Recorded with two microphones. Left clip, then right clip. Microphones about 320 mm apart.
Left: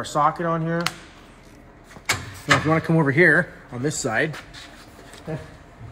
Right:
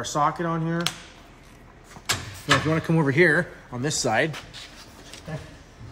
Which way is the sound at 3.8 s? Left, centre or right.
Right.